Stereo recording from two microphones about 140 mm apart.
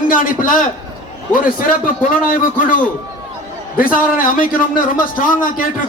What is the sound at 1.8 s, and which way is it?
Speech, 75° left (ahead or behind).